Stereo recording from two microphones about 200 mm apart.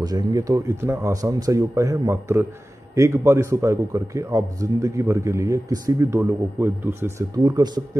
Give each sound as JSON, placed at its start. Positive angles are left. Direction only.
{"t": 0.0, "sound": "a man's voice", "side_deg": -20}